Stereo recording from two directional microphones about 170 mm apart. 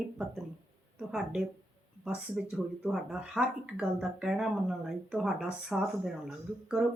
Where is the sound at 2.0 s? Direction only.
5° right (ahead or behind).